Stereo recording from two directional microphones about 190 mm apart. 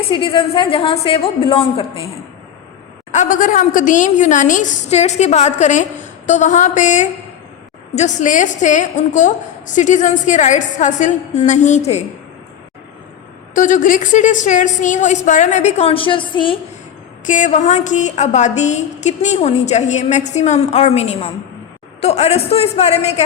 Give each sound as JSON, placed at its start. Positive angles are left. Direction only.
{"t": 0.1, "sound": "a woman's voice", "side_deg": 25}
{"t": 3.1, "sound": "a woman's voice", "side_deg": 40}
{"t": 13.5, "sound": "a woman's voice", "side_deg": 45}
{"t": 17.2, "sound": "a woman's voice", "side_deg": 40}